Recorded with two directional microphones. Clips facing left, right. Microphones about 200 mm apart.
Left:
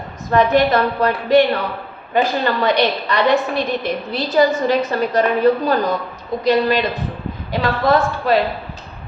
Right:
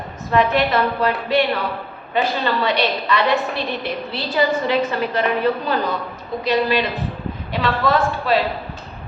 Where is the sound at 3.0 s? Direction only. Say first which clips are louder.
Left 3 dB; 40° left (ahead or behind).